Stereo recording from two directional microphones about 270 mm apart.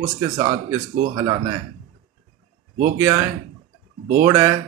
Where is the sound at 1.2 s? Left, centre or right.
Centre.